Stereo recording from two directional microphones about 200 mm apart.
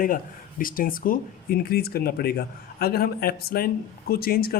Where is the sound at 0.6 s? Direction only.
45° left (ahead or behind).